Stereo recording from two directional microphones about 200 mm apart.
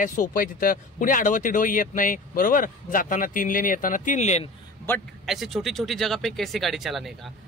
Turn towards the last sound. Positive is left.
turn(degrees=0)  # may be behind; listen again after turning